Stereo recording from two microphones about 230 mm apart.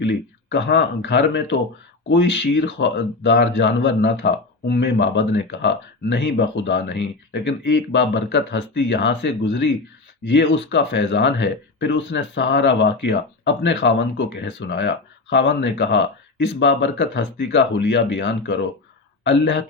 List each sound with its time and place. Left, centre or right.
0.0 s speech: left